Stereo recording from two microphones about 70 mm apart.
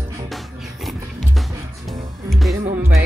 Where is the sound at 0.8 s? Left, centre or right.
Centre.